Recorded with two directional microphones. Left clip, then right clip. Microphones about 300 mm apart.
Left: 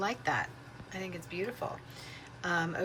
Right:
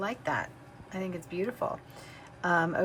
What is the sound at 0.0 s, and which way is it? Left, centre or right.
A woman's voice, centre.